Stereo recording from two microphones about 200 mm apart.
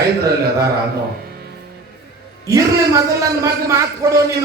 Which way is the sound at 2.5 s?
15° right (ahead or behind).